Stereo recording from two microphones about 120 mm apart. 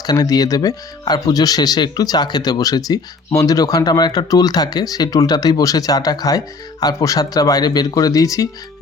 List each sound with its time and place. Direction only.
0.0 s speech: 35° left (ahead or behind)